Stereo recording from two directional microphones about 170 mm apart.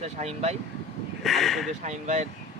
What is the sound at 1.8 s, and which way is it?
Speech, 45° right (ahead or behind).